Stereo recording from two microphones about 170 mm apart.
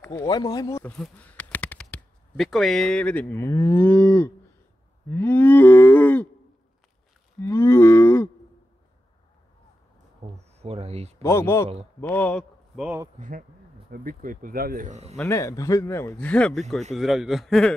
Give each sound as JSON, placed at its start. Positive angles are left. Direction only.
{"t": 0.1, "sound": "speech", "side_deg": 25}
{"t": 5.1, "sound": "cattle", "side_deg": 10}
{"t": 7.4, "sound": "cattle", "side_deg": 15}
{"t": 10.2, "sound": "a sound", "side_deg": -35}
{"t": 11.2, "sound": "a man's voice", "side_deg": 15}
{"t": 13.8, "sound": "speech", "side_deg": -60}
{"t": 15.1, "sound": "a man's voice", "side_deg": 15}